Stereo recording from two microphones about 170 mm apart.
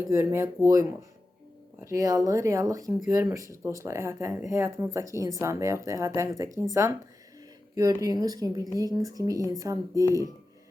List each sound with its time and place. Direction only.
0.0 s a woman's voice: 15° right (ahead or behind)
8.0 s a woman's voice: 20° right (ahead or behind)